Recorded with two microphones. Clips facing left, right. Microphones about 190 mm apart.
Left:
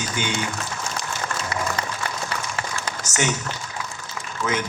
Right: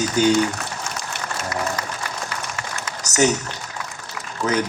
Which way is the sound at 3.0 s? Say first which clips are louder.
Right 7 dB; 40° right (ahead or behind).